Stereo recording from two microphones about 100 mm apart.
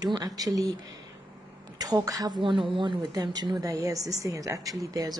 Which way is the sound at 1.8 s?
35° right (ahead or behind).